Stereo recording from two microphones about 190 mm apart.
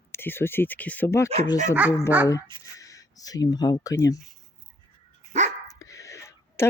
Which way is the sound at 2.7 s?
15° left (ahead or behind).